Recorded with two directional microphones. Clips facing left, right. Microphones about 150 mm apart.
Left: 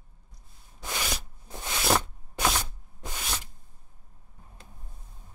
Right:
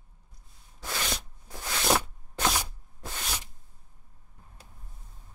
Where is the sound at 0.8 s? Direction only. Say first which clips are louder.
Even; 15° left (ahead or behind).